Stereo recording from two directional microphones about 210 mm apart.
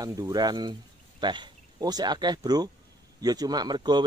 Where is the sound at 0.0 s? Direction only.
15° right (ahead or behind).